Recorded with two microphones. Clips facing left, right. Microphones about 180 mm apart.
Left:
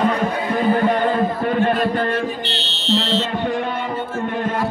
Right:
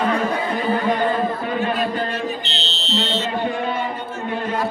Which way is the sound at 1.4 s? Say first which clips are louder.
Left 4 dB; 55° left (ahead or behind).